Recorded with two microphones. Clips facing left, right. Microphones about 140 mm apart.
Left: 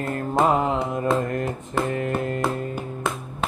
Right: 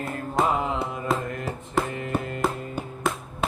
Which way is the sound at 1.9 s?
50° left (ahead or behind).